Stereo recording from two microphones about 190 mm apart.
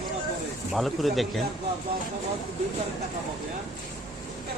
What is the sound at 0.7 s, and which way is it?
Speech, centre (ahead or behind).